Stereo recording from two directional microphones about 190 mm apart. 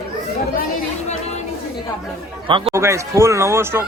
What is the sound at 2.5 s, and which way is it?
Speech, 25° right (ahead or behind).